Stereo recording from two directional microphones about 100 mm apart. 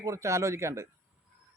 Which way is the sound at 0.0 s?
30° right (ahead or behind).